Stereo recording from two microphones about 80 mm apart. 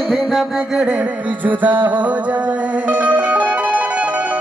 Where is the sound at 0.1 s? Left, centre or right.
Centre.